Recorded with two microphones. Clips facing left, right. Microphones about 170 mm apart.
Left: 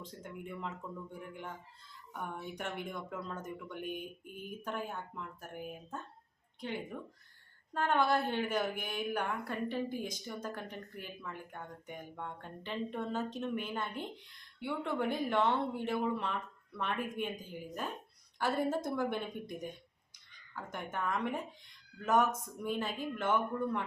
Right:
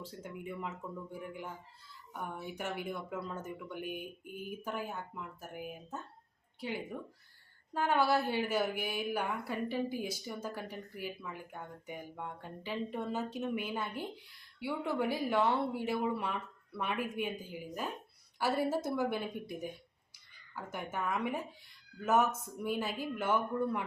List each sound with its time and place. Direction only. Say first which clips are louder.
0.0 s a woman's voice: right 2 dB; 5° right (ahead or behind)